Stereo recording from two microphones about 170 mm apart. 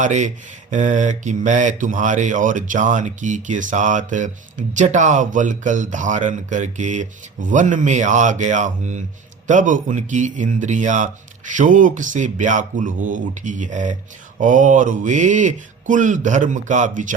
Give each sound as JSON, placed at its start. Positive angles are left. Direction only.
{"t": 0.0, "sound": "mantra", "side_deg": -45}